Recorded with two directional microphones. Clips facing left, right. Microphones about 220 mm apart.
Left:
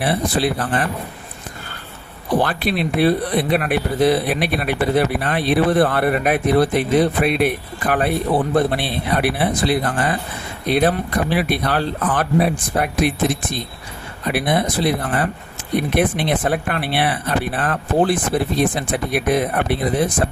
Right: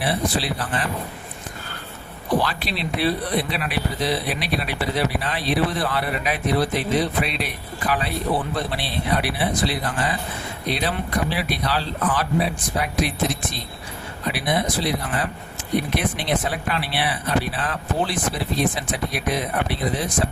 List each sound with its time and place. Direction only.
0.0 s speech: 50° left (ahead or behind)
2.4 s speech: 55° left (ahead or behind)